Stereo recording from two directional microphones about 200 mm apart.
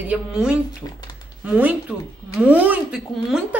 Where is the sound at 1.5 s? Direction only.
5° right (ahead or behind).